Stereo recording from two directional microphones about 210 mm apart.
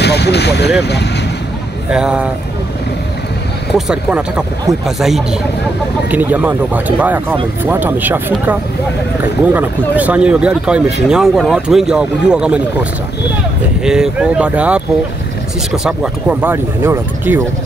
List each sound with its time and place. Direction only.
0.0 s speech: 50° left (ahead or behind)
1.9 s speech: 5° right (ahead or behind)
3.7 s speech: 5° right (ahead or behind)
13.8 s speech: 5° right (ahead or behind)